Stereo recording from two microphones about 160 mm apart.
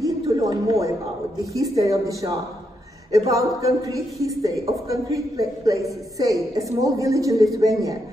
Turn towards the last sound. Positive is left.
turn(degrees=-20)  # may be behind; listen again after turning